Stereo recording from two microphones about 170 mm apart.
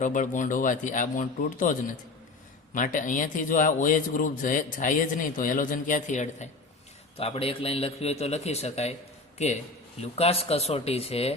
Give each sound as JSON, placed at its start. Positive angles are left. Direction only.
{"t": 0.0, "sound": "a man's voice", "side_deg": 50}
{"t": 10.0, "sound": "a man's voice", "side_deg": 35}